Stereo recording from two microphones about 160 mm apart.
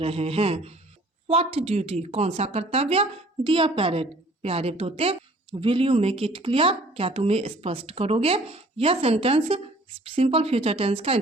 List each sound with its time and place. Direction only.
0.0 s a woman's voice: 35° right (ahead or behind)